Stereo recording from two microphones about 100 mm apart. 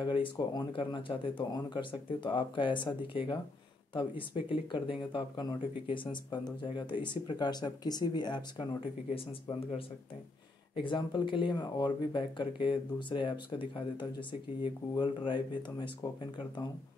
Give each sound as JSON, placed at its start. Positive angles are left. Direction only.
{"t": 0.0, "sound": "speech", "side_deg": 55}
{"t": 9.1, "sound": "speech", "side_deg": 75}
{"t": 10.8, "sound": "speech", "side_deg": 55}